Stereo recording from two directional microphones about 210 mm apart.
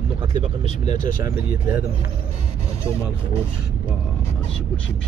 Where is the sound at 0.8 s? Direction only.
35° left (ahead or behind).